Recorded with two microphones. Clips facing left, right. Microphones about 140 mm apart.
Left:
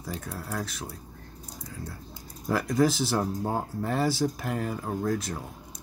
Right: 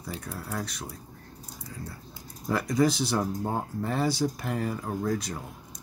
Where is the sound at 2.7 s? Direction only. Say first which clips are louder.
Even; centre (ahead or behind).